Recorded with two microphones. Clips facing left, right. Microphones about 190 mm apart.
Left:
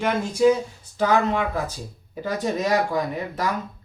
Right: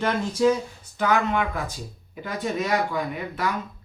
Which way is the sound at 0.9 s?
35° left (ahead or behind).